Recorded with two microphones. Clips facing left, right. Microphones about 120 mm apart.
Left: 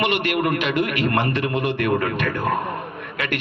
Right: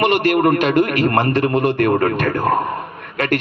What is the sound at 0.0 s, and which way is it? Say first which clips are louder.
A man's voice: right 6 dB; 40° right (ahead or behind).